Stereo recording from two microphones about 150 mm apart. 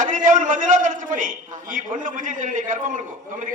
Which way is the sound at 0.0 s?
60° right (ahead or behind).